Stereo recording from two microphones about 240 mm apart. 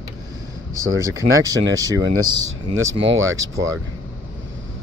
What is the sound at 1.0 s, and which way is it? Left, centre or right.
Speech, centre.